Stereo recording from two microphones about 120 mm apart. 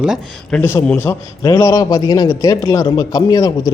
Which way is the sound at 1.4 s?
30° left (ahead or behind).